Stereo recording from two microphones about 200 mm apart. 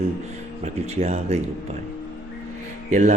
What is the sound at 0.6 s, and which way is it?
Speech, 30° right (ahead or behind).